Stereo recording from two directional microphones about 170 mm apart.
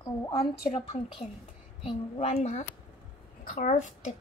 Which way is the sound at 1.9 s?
40° left (ahead or behind).